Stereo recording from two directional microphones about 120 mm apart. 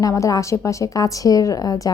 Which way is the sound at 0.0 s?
30° left (ahead or behind).